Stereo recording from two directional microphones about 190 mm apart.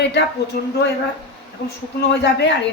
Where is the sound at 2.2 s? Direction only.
65° left (ahead or behind).